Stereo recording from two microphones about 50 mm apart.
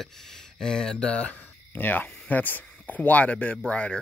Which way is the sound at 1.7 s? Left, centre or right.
Left.